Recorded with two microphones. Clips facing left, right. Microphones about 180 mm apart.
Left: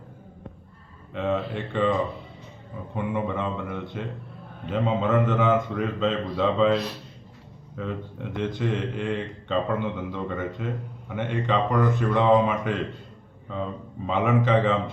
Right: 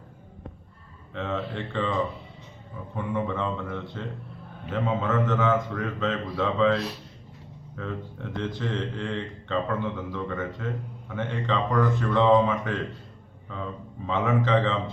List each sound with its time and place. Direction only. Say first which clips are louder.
1.1 s speech: left 4 dB; 10° left (ahead or behind)
2.9 s speech: left 1 dB; 15° left (ahead or behind)
7.8 s speech: left 2 dB; 15° left (ahead or behind)
14.1 s speech: left 2 dB; 15° left (ahead or behind)